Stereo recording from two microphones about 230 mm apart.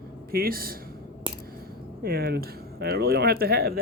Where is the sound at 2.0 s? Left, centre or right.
Right.